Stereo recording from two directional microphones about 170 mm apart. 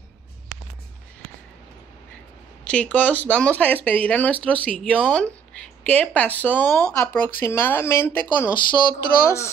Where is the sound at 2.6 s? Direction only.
5° left (ahead or behind).